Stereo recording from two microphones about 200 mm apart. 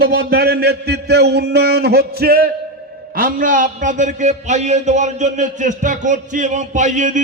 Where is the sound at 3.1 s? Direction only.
45° right (ahead or behind).